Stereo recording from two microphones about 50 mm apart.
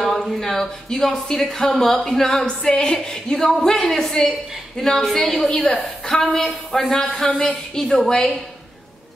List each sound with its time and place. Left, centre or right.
0.0 s a woman's voice: centre